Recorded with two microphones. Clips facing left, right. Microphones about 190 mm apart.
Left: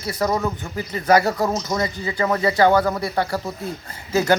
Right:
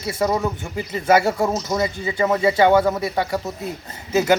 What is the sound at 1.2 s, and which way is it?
Speech, 25° right (ahead or behind).